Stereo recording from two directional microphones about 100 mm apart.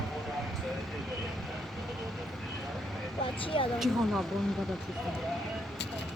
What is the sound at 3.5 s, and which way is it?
Speech, 60° left (ahead or behind).